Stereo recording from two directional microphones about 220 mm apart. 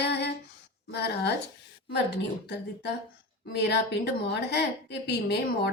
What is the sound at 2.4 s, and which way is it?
A woman's voice, 50° left (ahead or behind).